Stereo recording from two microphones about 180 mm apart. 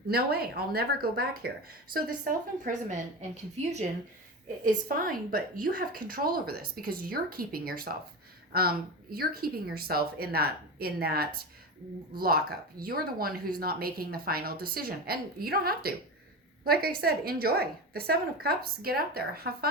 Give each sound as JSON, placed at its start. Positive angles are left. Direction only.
{"t": 0.1, "sound": "a woman's voice", "side_deg": -60}
{"t": 4.6, "sound": "a woman's voice", "side_deg": -50}